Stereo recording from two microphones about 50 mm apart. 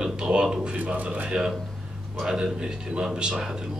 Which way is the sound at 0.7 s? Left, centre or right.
Right.